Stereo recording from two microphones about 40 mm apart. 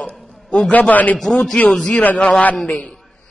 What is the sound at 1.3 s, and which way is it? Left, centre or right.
Speech, centre.